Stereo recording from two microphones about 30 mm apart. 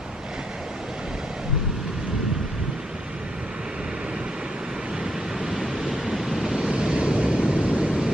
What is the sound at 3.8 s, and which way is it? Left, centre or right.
Vehicle, right.